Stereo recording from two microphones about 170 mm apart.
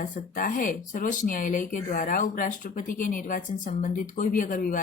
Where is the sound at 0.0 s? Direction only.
55° left (ahead or behind).